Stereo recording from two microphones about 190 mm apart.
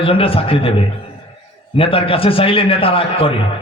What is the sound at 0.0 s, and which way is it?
Speech, 30° left (ahead or behind).